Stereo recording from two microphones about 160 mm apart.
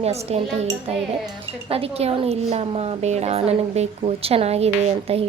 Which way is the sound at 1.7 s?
40° right (ahead or behind).